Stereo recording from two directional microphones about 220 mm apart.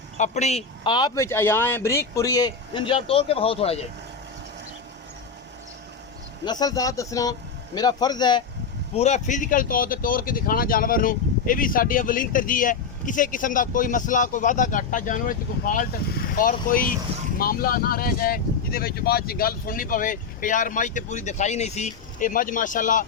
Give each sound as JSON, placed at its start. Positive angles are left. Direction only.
{"t": 0.2, "sound": "a man's voice", "side_deg": 30}
{"t": 6.4, "sound": "a man's voice", "side_deg": 20}
{"t": 9.0, "sound": "speech", "side_deg": 30}